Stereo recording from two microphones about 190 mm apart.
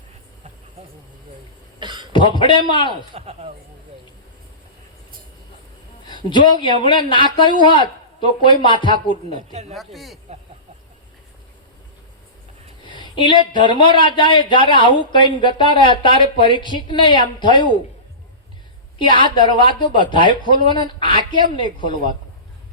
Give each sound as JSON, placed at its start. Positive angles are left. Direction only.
{"t": 1.8, "sound": "cough", "side_deg": -25}
{"t": 2.1, "sound": "speech", "side_deg": 25}
{"t": 3.2, "sound": "speech", "side_deg": -35}
{"t": 6.1, "sound": "a woman's voice", "side_deg": 25}
{"t": 9.3, "sound": "speech", "side_deg": -35}
{"t": 9.7, "sound": "speech", "side_deg": 0}
{"t": 12.8, "sound": "a sound", "side_deg": 25}
{"t": 13.5, "sound": "speech", "side_deg": 25}
{"t": 18.9, "sound": "speech", "side_deg": 25}